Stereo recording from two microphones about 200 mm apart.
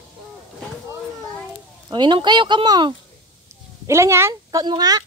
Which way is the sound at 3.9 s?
15° right (ahead or behind).